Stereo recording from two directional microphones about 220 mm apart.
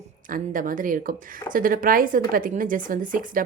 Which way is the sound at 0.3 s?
40° right (ahead or behind).